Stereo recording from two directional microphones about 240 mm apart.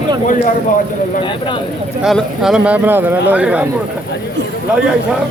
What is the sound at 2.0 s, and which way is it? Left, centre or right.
Speech, centre.